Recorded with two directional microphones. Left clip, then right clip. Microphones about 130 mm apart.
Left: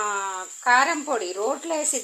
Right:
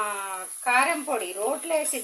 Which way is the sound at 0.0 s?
45° left (ahead or behind).